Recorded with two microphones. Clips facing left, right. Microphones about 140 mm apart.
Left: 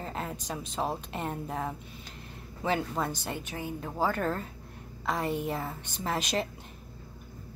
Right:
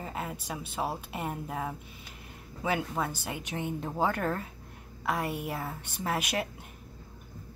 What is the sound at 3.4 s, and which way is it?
A woman's voice, 20° right (ahead or behind).